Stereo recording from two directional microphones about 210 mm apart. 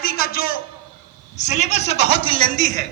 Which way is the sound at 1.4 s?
35° left (ahead or behind).